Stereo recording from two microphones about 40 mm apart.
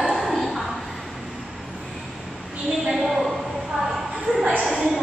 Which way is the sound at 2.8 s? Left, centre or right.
Centre.